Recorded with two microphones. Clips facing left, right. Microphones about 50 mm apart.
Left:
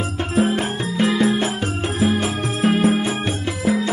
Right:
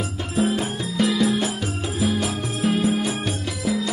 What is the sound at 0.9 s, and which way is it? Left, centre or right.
Music, left.